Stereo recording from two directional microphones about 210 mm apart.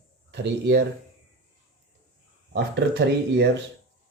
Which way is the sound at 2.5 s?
55° right (ahead or behind).